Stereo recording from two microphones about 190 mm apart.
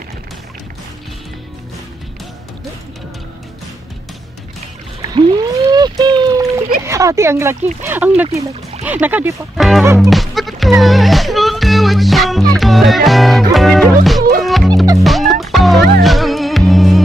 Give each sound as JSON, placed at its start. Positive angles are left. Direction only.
{"t": 5.1, "sound": "a sound", "side_deg": -20}
{"t": 6.8, "sound": "speech", "side_deg": -15}
{"t": 9.9, "sound": "music", "side_deg": 0}